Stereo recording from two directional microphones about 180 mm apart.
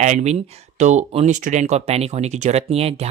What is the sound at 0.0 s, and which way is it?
Speech, 40° right (ahead or behind).